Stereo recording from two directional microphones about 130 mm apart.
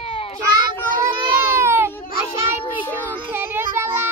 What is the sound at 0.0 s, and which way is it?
Child singing, 45° left (ahead or behind).